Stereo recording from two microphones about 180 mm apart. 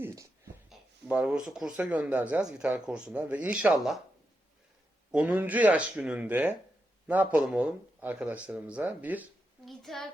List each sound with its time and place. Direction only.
0.0 s a sound: 15° right (ahead or behind)
0.7 s speech: 5° right (ahead or behind)
5.1 s a child's voice: 10° right (ahead or behind)